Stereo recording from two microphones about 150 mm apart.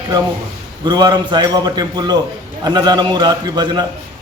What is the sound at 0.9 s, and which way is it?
A man's voice, 30° right (ahead or behind).